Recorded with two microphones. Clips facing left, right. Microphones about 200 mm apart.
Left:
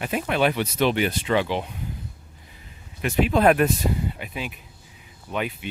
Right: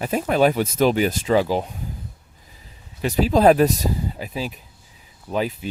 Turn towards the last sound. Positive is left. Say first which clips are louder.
# right 4 dB
turn(degrees=-35)  # may be behind; listen again after turning